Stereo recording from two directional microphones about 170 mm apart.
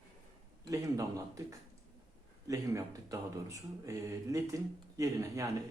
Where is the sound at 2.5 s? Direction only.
20° right (ahead or behind).